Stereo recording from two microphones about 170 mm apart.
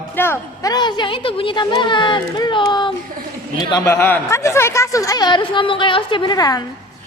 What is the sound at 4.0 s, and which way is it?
Speech, 10° left (ahead or behind).